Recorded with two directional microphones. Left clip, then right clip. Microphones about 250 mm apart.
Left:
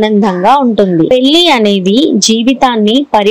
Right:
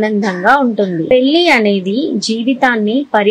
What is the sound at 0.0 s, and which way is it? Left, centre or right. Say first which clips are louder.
A woman's voice: left 4 dB; centre.